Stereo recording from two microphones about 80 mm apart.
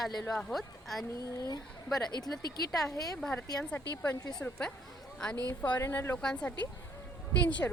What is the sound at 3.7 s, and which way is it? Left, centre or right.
Speech, left.